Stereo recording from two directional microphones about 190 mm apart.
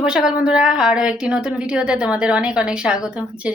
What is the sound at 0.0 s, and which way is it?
A woman's voice, 5° right (ahead or behind).